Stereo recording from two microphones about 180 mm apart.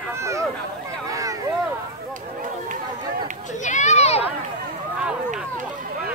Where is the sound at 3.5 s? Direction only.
45° left (ahead or behind).